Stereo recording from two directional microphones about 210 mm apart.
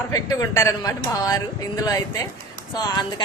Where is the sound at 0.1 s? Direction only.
15° left (ahead or behind).